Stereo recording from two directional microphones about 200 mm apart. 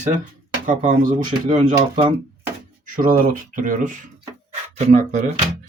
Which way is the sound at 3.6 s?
40° right (ahead or behind).